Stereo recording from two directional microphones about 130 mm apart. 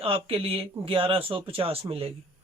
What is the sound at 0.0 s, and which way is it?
Speech, 45° right (ahead or behind).